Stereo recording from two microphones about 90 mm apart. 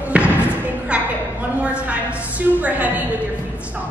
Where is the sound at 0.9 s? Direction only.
15° right (ahead or behind).